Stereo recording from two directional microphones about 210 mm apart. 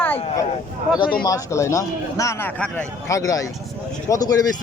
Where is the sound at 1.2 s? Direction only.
15° left (ahead or behind).